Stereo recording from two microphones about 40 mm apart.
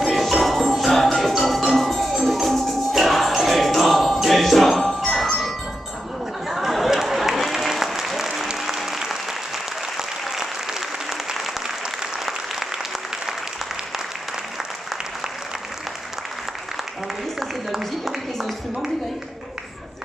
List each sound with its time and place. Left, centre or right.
0.0 s music: centre
4.2 s jingle bell: centre
6.5 s applause: centre
17.4 s a sound: centre